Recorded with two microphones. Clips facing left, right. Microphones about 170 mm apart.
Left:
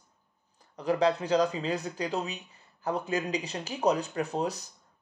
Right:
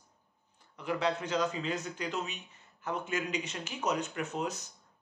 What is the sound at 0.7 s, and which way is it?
Speech, 35° left (ahead or behind).